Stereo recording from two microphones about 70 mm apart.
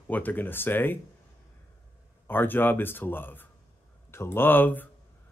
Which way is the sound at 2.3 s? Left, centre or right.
Left.